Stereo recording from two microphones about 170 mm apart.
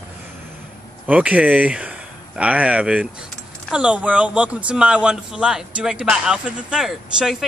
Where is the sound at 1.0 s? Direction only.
10° right (ahead or behind).